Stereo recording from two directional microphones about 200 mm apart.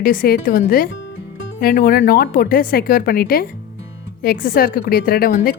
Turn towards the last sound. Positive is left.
turn(degrees=45)  # may be behind; listen again after turning